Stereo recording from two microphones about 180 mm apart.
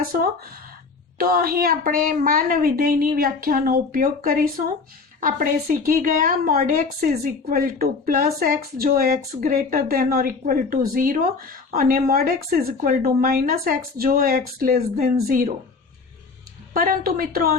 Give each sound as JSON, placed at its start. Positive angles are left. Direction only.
{"t": 1.2, "sound": "a woman's voice", "side_deg": -55}
{"t": 16.7, "sound": "a woman's voice", "side_deg": -50}